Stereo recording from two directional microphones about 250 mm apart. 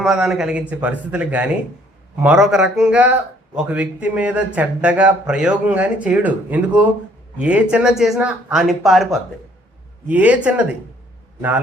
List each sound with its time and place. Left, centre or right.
0.0 s a man's voice: centre
10.1 s a man's voice: centre